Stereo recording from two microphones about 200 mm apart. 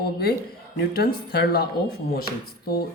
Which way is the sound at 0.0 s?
50° left (ahead or behind).